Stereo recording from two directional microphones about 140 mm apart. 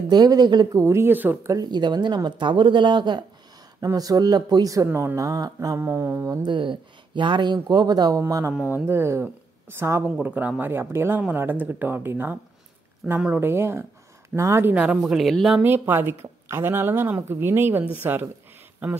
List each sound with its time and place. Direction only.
0.1 s speech: 30° right (ahead or behind)
0.8 s speech: 15° right (ahead or behind)
6.4 s speech: 35° right (ahead or behind); by 15.6 s centre (ahead or behind)
15.6 s speech: 15° right (ahead or behind)